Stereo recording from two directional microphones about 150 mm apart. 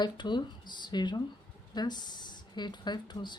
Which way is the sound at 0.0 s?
30° left (ahead or behind).